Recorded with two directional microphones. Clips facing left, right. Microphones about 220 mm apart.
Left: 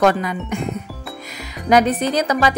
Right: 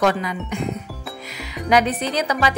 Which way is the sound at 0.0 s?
50° left (ahead or behind).